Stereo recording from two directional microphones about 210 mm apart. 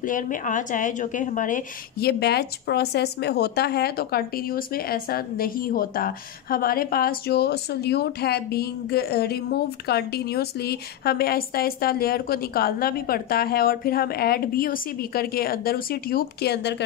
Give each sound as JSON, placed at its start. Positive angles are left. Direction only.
{"t": 0.0, "sound": "a woman's voice", "side_deg": 40}